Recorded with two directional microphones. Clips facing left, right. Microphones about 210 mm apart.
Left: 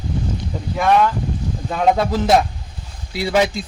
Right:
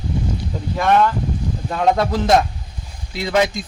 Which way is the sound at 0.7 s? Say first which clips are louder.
Even; 5° left (ahead or behind).